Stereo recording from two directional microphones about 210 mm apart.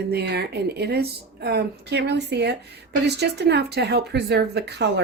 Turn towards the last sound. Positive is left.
turn(degrees=-55)  # may be behind; listen again after turning